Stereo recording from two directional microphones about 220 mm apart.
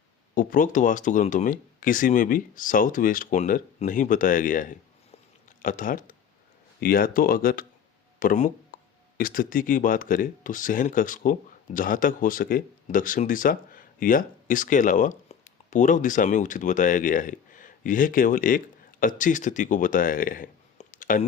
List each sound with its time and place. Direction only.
0.3 s speech: 40° left (ahead or behind)
5.1 s a sound: 35° left (ahead or behind)
6.7 s speech: 40° left (ahead or behind)